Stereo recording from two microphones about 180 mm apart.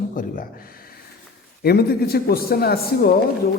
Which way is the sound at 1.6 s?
60° left (ahead or behind).